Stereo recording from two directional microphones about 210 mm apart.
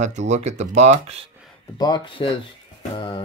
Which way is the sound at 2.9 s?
20° left (ahead or behind).